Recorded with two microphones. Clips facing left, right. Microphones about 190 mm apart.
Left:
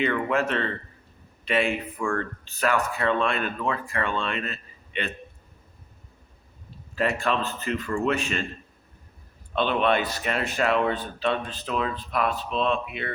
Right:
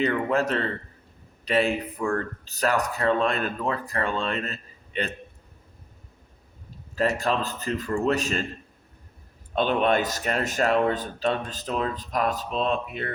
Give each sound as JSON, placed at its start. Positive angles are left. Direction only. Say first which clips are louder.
{"t": 0.0, "sound": "speech", "louder": "right 1 dB", "side_deg": -35}
{"t": 6.9, "sound": "speech", "louder": "right 1 dB", "side_deg": -40}
{"t": 9.6, "sound": "speech", "louder": "right 1 dB", "side_deg": -45}